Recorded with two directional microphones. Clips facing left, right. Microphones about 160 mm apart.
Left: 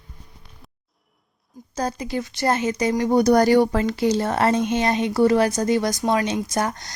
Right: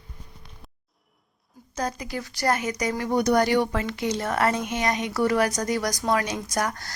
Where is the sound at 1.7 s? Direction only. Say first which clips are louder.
Left 4 dB; 30° left (ahead or behind).